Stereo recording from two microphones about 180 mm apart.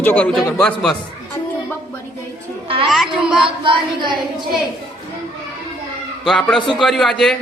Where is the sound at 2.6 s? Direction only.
30° right (ahead or behind).